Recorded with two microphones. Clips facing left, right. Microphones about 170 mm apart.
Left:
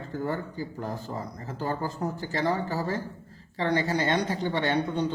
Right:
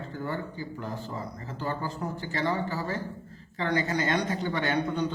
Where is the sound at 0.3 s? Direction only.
40° left (ahead or behind).